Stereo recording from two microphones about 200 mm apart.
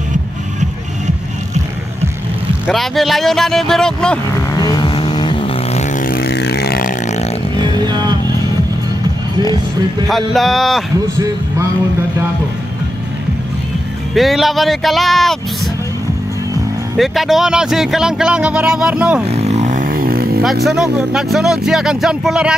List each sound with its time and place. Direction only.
2.6 s speech: centre (ahead or behind)
4.6 s vehicle: 20° left (ahead or behind)
5.9 s vehicle: 45° left (ahead or behind)
7.5 s a sound: 20° right (ahead or behind)
10.0 s speech: centre (ahead or behind)
14.1 s speech: centre (ahead or behind)
16.9 s speech: centre (ahead or behind)
19.2 s vehicle: 30° right (ahead or behind); by 20.4 s 50° right (ahead or behind)
20.6 s speech: centre (ahead or behind)